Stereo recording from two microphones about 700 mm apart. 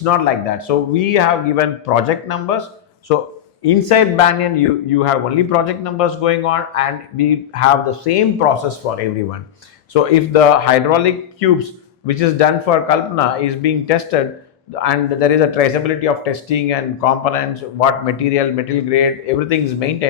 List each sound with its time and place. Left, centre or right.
0.0 s a man's voice: left
3.6 s a man's voice: left